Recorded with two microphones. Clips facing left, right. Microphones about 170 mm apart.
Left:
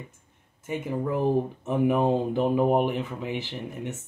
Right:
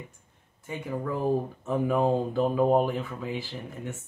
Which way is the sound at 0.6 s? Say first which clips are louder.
Left 3 dB; 20° left (ahead or behind).